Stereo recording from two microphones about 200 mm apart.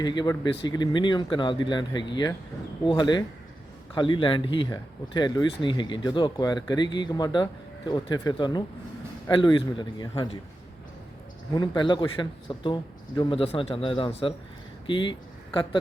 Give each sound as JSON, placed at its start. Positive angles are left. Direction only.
{"t": 0.0, "sound": "speech", "side_deg": 20}
{"t": 11.5, "sound": "speech", "side_deg": 20}